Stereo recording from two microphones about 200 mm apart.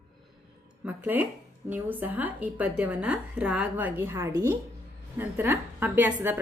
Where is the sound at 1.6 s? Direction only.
10° right (ahead or behind).